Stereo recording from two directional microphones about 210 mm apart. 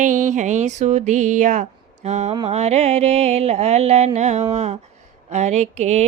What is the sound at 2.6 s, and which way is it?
Mantra, 30° right (ahead or behind).